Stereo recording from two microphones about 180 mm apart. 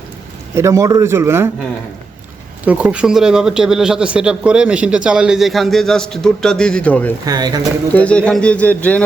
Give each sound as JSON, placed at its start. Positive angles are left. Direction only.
{"t": 0.5, "sound": "speech", "side_deg": -15}
{"t": 2.6, "sound": "a man's voice", "side_deg": -10}
{"t": 7.3, "sound": "speech", "side_deg": -20}
{"t": 7.9, "sound": "speech", "side_deg": 5}